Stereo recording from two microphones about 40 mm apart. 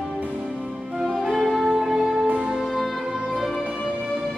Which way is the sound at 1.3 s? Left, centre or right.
Centre.